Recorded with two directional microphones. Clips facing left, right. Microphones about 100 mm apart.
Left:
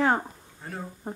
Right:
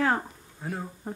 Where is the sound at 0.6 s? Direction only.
5° right (ahead or behind).